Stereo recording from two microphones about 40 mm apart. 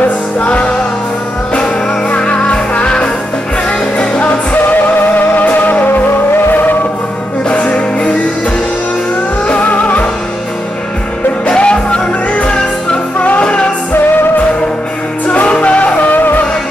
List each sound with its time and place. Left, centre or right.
0.0 s music: left
4.8 s music: left
7.4 s music: left
9.5 s music: left
11.4 s music: left
13.2 s music: left
13.9 s music: left
15.2 s music: left